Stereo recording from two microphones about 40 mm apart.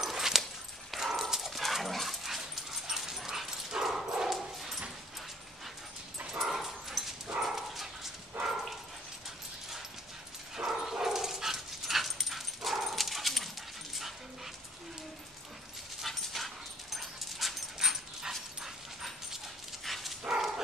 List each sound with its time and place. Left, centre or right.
0.0 s dog: centre
6.2 s dog: centre
10.5 s dog: centre
16.1 s dog: centre
17.7 s dog: centre
19.0 s dog: centre
20.3 s dog: centre